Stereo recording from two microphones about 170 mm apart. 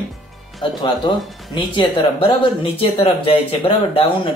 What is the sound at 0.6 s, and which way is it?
Speech, 25° left (ahead or behind).